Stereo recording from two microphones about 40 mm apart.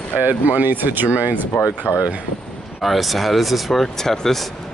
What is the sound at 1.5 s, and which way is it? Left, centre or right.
Speech, left.